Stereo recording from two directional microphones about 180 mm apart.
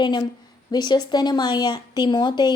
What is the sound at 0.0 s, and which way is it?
A woman's voice, 25° left (ahead or behind).